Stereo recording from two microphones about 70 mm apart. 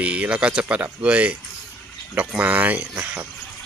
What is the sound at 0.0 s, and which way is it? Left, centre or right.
Speech, centre.